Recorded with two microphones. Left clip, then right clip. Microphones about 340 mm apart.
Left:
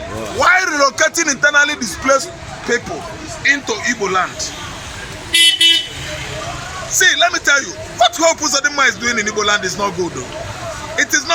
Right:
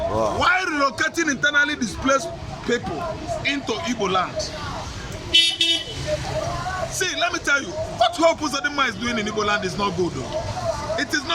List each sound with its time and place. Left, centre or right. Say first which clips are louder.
0.3 s a man's voice: left 11 dB; centre
5.3 s vehicle: left 5 dB; centre
7.0 s a man's voice: left 12 dB; centre
10.9 s speech: left 11 dB; centre